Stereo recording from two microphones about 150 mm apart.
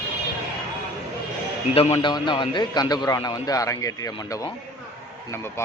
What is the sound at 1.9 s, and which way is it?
A man's voice, 30° left (ahead or behind).